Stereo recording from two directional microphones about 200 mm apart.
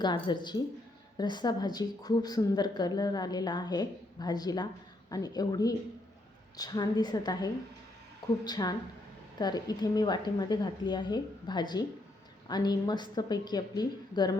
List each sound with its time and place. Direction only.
0.0 s a woman's voice: 20° left (ahead or behind)